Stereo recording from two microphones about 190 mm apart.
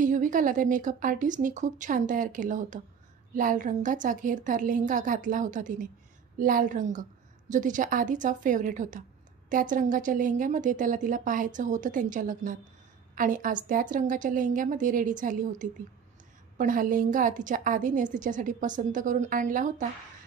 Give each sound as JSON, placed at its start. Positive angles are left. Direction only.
{"t": 0.0, "sound": "a woman's voice", "side_deg": -45}